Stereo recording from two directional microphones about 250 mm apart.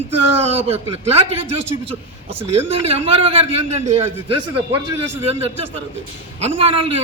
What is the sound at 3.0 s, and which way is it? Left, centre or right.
Speech, right.